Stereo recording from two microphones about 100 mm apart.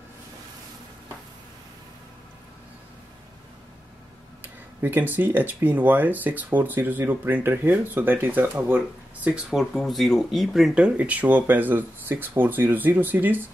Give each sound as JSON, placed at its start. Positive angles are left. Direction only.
{"t": 4.8, "sound": "speech", "side_deg": -20}